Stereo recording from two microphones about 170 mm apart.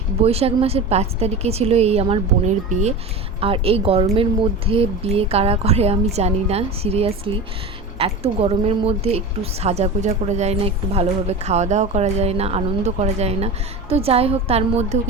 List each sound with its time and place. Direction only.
0.2 s speech: 35° right (ahead or behind)